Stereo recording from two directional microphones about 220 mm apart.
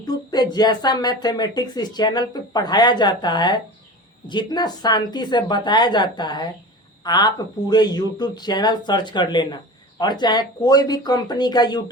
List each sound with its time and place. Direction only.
0.1 s speech: 20° left (ahead or behind)